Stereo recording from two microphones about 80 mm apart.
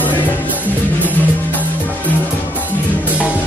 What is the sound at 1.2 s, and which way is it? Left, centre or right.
Music, left.